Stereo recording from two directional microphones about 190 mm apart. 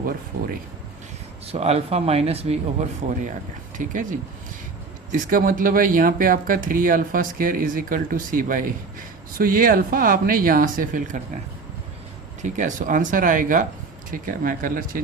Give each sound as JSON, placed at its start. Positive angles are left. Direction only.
{"t": 1.5, "sound": "speech", "side_deg": -35}
{"t": 5.1, "sound": "speech", "side_deg": -45}
{"t": 12.4, "sound": "speech", "side_deg": -40}